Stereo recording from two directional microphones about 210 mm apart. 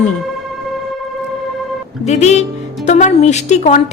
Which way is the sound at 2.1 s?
30° left (ahead or behind).